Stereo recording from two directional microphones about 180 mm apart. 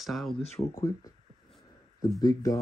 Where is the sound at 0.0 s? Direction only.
Centre (ahead or behind).